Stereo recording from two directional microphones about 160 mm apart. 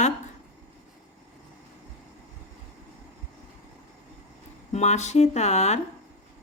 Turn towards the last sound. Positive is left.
turn(degrees=45)  # may be behind; listen again after turning